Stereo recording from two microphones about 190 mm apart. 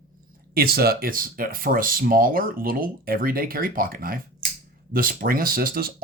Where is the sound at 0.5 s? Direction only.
55° right (ahead or behind).